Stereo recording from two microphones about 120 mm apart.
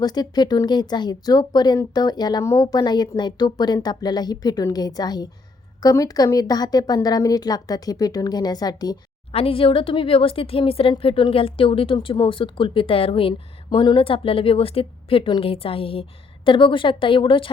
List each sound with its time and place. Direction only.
0.0 s speech: 35° left (ahead or behind)
9.3 s a woman's voice: 50° left (ahead or behind)